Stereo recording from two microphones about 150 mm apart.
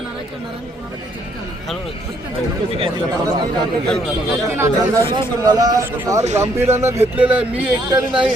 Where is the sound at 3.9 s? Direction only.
Centre (ahead or behind).